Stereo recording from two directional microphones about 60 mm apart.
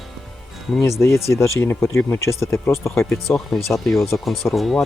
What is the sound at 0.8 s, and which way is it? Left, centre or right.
Speech, left.